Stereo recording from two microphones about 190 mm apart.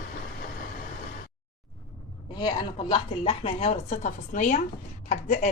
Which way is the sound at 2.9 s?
30° left (ahead or behind).